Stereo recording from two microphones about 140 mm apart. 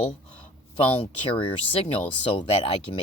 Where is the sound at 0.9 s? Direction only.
40° left (ahead or behind).